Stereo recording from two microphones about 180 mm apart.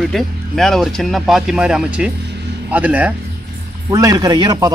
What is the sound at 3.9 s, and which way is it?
Speech, 20° right (ahead or behind).